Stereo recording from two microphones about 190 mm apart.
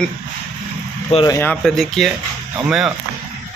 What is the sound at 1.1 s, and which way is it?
Speech, 20° left (ahead or behind).